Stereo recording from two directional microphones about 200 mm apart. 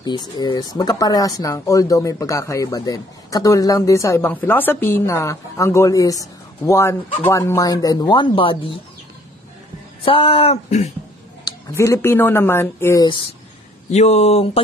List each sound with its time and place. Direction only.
0.4 s speech: 20° left (ahead or behind)
10.0 s speech: 30° left (ahead or behind)
11.4 s speech: 15° left (ahead or behind)
13.0 s speech: 25° left (ahead or behind)
13.8 s speech: 35° left (ahead or behind)